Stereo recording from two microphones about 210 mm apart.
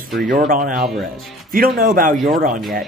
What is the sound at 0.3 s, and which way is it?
Speech, 40° right (ahead or behind).